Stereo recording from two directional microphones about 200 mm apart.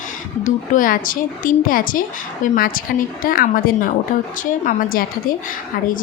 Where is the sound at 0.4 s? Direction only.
40° left (ahead or behind).